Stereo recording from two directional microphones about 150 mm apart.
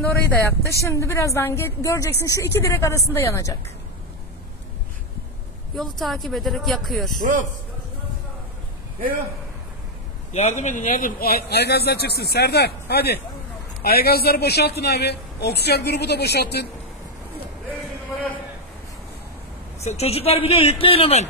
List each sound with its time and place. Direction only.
0.5 s a woman's voice: 20° left (ahead or behind)
5.8 s speech: centre (ahead or behind)
7.2 s a man's voice: 60° right (ahead or behind)
10.3 s a man's voice: 50° left (ahead or behind); by 16.6 s 90° left
19.8 s speech: 45° left (ahead or behind)